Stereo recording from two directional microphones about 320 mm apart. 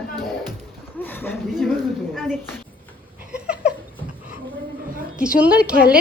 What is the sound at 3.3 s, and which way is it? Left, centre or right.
Dog, centre.